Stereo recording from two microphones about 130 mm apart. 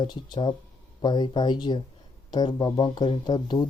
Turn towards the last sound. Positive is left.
turn(degrees=35)  # may be behind; listen again after turning